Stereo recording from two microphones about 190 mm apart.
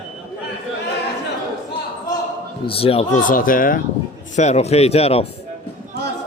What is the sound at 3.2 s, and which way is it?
Speech, 45° left (ahead or behind).